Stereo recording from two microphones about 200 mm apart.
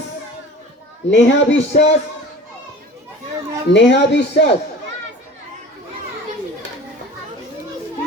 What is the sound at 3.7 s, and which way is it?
Speech, 60° left (ahead or behind).